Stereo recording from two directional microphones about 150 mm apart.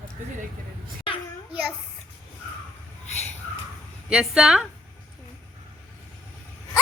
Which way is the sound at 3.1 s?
50° left (ahead or behind).